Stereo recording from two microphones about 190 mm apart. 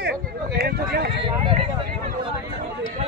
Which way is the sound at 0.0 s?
55° right (ahead or behind).